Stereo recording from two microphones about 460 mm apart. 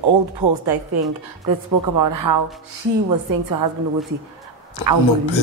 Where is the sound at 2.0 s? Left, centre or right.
Right.